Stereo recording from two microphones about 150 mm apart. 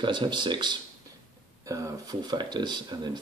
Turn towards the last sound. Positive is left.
turn(degrees=-30)  # may be behind; listen again after turning